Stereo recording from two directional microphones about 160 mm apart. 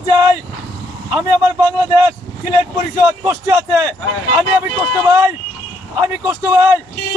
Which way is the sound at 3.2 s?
15° right (ahead or behind).